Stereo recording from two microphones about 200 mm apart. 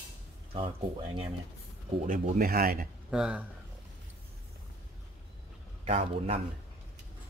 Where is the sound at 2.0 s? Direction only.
40° right (ahead or behind).